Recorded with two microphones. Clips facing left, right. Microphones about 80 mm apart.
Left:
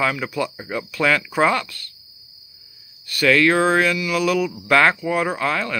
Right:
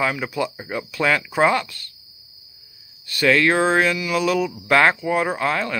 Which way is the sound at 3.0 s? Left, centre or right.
Right.